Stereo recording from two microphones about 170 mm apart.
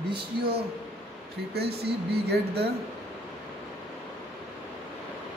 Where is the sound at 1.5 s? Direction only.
70° right (ahead or behind).